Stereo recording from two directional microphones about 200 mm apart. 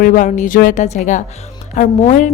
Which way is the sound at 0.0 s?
40° left (ahead or behind).